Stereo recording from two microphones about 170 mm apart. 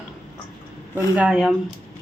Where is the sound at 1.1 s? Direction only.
5° right (ahead or behind).